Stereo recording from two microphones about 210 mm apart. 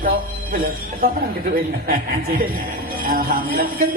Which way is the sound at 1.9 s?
40° right (ahead or behind).